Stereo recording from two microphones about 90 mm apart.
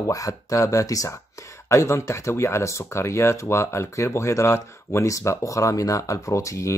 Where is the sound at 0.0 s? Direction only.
40° left (ahead or behind).